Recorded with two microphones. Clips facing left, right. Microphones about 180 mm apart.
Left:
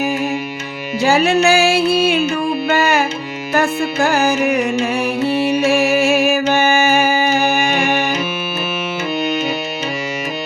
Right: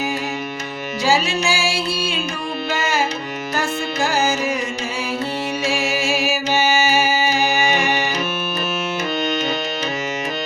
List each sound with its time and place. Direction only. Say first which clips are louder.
1.0 s music: left 6 dB; 60° left (ahead or behind)